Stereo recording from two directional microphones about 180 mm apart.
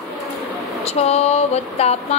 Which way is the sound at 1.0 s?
35° left (ahead or behind).